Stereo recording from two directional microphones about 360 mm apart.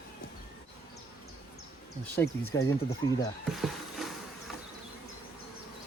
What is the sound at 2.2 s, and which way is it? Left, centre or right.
Speech, left.